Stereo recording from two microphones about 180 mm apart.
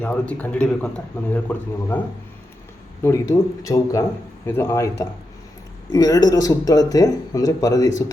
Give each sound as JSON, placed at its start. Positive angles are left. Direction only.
{"t": 0.0, "sound": "a man's voice", "side_deg": 10}
{"t": 3.0, "sound": "a man's voice", "side_deg": 15}